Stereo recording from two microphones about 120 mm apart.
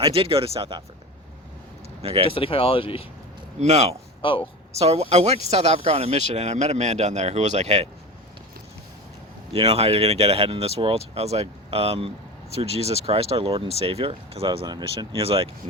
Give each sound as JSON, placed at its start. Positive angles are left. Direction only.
{"t": 0.0, "sound": "speech", "side_deg": -50}
{"t": 2.0, "sound": "speech", "side_deg": -55}
{"t": 2.3, "sound": "speech", "side_deg": 50}
{"t": 3.6, "sound": "speech", "side_deg": -65}
{"t": 4.2, "sound": "speech", "side_deg": 45}
{"t": 4.7, "sound": "speech", "side_deg": -60}
{"t": 9.5, "sound": "speech", "side_deg": -55}